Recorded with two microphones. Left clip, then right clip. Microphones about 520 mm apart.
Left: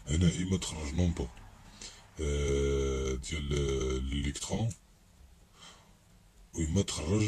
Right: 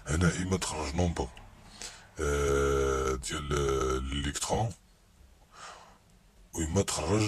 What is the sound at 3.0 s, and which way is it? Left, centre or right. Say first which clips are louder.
Speech: right 4 dB; centre.